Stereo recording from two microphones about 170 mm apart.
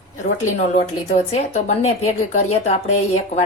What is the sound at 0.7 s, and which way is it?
Speech, 40° left (ahead or behind).